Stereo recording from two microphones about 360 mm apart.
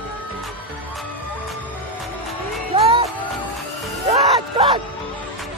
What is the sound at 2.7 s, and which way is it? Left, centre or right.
Music, centre.